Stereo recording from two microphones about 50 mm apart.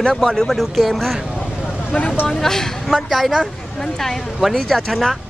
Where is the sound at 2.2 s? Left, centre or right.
Centre.